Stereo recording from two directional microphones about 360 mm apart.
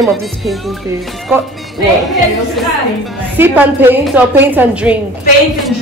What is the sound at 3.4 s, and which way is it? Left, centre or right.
Speech, centre.